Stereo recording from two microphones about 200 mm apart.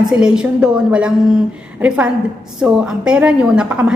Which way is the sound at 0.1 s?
5° right (ahead or behind).